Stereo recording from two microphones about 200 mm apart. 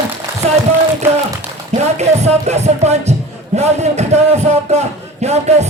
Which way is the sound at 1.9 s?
35° right (ahead or behind).